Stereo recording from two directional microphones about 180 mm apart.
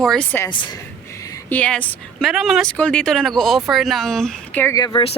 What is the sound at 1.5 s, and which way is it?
Speech, 10° left (ahead or behind).